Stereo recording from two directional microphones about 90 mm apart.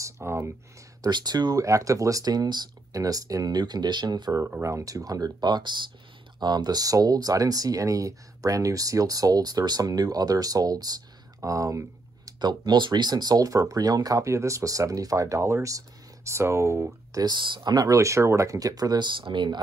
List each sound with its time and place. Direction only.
0.0 s a sound: 30° right (ahead or behind)
1.0 s speech: 50° right (ahead or behind)
4.5 s speech: 30° right (ahead or behind)
11.4 s a sound: 40° right (ahead or behind)
12.4 s speech: 50° right (ahead or behind); by 17.2 s 35° right (ahead or behind)
17.2 s speech: 60° right (ahead or behind)
17.8 s speech: 35° right (ahead or behind); by 19.6 s 55° right (ahead or behind)